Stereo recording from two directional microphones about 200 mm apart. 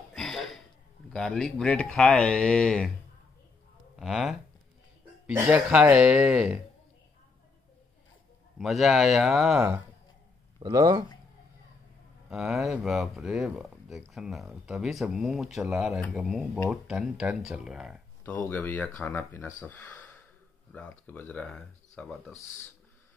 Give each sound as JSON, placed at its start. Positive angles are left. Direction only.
{"t": 0.1, "sound": "a sound", "side_deg": 0}
{"t": 1.1, "sound": "speech", "side_deg": 5}
{"t": 4.0, "sound": "speech", "side_deg": 0}
{"t": 8.5, "sound": "speech", "side_deg": 0}
{"t": 10.6, "sound": "speech", "side_deg": -20}
{"t": 12.3, "sound": "speech", "side_deg": 0}
{"t": 18.2, "sound": "speech", "side_deg": 10}